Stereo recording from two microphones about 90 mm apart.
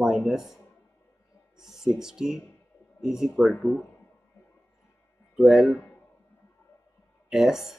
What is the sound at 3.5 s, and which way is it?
Speech, 20° left (ahead or behind).